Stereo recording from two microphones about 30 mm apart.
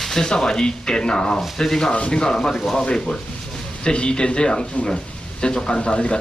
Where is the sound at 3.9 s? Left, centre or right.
Left.